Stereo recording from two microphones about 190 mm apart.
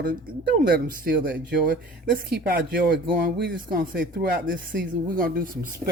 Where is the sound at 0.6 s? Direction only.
50° right (ahead or behind).